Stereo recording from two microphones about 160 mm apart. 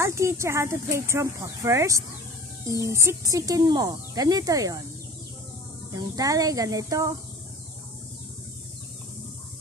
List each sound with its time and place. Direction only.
0.0 s speech: 15° right (ahead or behind)
6.1 s speech: 20° right (ahead or behind)